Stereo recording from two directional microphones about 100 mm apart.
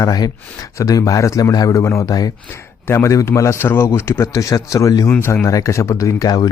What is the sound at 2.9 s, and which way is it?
A man's voice, 25° left (ahead or behind).